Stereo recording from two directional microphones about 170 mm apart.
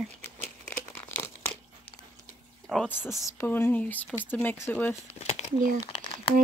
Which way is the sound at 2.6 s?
Centre (ahead or behind).